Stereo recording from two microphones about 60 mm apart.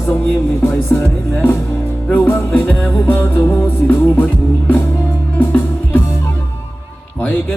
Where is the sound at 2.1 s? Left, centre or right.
Left.